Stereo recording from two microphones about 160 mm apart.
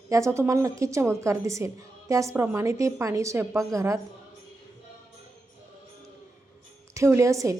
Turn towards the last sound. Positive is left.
turn(degrees=-20)  # may be behind; listen again after turning